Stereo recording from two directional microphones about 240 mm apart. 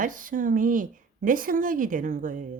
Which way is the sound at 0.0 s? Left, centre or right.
Right.